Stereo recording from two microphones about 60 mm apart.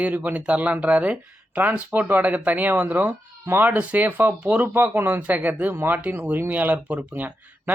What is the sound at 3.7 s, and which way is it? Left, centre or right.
Speech, right.